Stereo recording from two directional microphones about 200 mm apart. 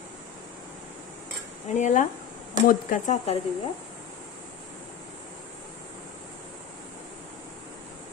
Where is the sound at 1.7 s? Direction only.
40° left (ahead or behind).